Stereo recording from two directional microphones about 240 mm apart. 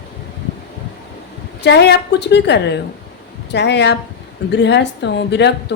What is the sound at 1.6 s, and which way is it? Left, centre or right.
A woman's voice, left.